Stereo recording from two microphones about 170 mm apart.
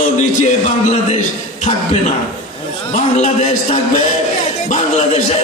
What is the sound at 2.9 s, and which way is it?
A man's voice, 45° left (ahead or behind).